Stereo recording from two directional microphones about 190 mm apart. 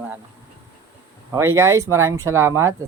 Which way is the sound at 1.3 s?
15° right (ahead or behind).